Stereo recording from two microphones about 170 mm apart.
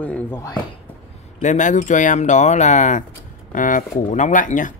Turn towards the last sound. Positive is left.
turn(degrees=50)  # may be behind; listen again after turning